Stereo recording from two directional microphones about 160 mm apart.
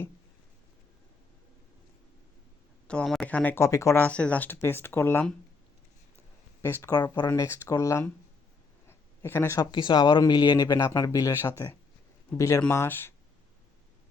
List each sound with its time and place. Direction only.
2.8 s speech: 5° left (ahead or behind)
6.6 s speech: 15° left (ahead or behind)
8.9 s a sound: 15° left (ahead or behind)
9.6 s speech: 30° left (ahead or behind)